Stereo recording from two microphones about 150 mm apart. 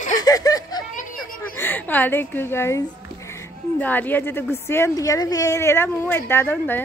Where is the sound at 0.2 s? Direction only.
25° left (ahead or behind).